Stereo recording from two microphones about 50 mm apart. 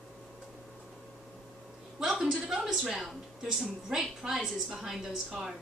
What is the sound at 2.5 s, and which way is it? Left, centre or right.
A woman's voice, centre.